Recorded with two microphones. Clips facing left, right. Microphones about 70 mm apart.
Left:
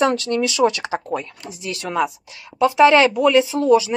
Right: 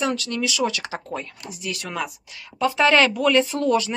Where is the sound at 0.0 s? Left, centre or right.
Left.